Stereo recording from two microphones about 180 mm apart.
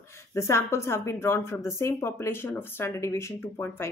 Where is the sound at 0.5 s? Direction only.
15° left (ahead or behind).